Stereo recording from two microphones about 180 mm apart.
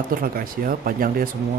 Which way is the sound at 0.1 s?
50° right (ahead or behind).